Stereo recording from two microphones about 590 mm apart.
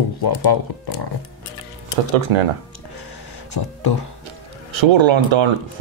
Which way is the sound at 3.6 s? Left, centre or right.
Left.